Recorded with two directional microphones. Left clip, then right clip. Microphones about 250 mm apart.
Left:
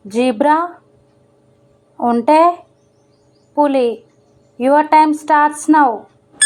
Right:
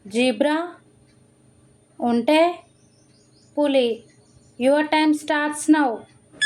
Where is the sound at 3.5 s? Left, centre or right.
Left.